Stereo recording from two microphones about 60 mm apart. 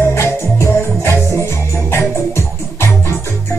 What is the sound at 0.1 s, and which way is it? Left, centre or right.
Music, left.